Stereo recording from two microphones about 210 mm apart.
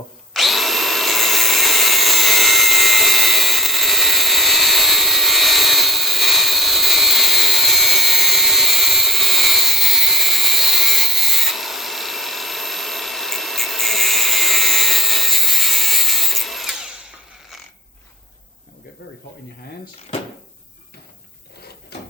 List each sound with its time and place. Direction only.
0.3 s drill: centre (ahead or behind)
19.0 s snake: 50° left (ahead or behind)